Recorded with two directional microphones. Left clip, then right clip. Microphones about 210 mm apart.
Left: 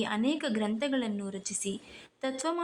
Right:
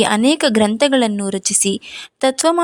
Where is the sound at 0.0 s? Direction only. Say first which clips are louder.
Right 17 dB; 45° right (ahead or behind).